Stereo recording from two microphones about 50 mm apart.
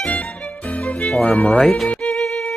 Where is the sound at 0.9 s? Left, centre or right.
Left.